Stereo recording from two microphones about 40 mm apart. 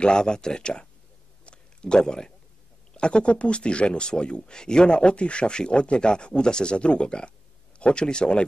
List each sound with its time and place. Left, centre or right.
0.0 s speech: centre
1.4 s a sound: left
2.9 s speech: left